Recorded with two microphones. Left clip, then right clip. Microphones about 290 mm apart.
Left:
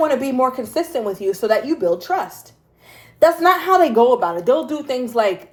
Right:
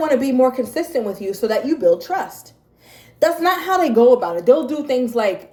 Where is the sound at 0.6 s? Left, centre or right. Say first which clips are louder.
Right 1 dB; left.